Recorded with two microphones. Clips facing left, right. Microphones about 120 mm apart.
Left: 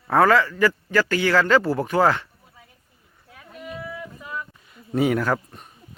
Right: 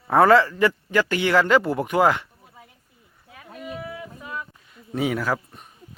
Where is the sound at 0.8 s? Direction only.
20° right (ahead or behind).